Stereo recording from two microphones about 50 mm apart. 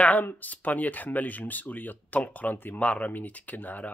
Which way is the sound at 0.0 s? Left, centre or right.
Left.